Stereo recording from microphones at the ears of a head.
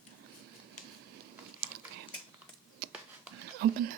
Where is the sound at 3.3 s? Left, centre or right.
Right.